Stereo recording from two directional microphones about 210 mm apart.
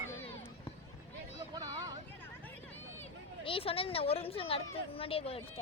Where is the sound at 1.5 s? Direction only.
20° right (ahead or behind).